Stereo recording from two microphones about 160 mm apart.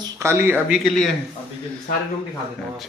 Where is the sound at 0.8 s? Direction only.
Centre (ahead or behind).